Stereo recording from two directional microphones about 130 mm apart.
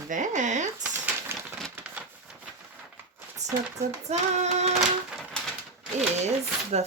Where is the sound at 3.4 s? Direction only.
60° right (ahead or behind).